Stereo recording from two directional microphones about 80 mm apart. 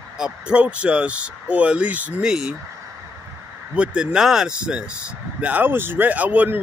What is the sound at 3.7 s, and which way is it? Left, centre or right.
Speech, centre.